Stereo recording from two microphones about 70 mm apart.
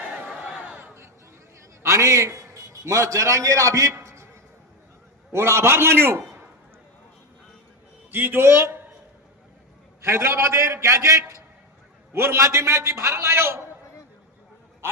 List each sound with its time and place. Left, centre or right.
1.8 s a man's voice: right
5.3 s a man's voice: right
8.1 s a man's voice: right
10.0 s a man's voice: right